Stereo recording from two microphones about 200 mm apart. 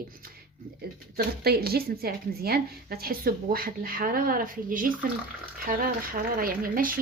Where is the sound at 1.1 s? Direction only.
50° right (ahead or behind).